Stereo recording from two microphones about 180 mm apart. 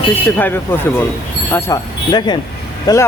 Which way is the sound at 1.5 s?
20° left (ahead or behind).